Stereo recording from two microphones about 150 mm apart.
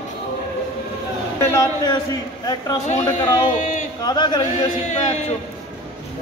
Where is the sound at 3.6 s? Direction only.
55° left (ahead or behind).